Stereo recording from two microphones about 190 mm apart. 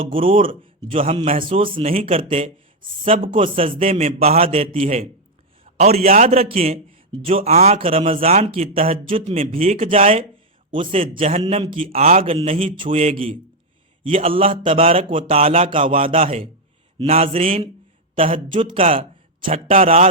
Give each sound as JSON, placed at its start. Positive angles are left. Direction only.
{"t": 0.1, "sound": "a man's voice", "side_deg": -30}